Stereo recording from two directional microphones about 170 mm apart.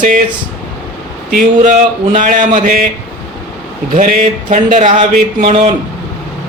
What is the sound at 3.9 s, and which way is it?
Speech, 50° right (ahead or behind).